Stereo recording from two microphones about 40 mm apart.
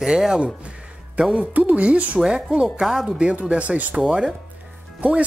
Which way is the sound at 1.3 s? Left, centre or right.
Right.